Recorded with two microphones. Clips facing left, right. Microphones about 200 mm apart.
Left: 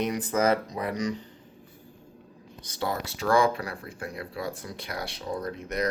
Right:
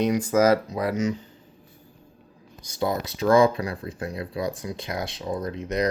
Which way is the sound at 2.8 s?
20° right (ahead or behind).